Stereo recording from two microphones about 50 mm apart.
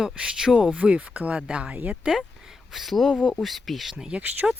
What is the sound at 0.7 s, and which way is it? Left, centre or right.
Speech, right.